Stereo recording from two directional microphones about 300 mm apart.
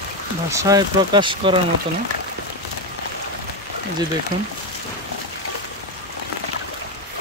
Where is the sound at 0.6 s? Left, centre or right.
Centre.